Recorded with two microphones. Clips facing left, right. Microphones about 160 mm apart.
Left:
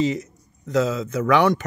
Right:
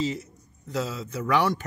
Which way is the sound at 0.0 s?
75° left (ahead or behind).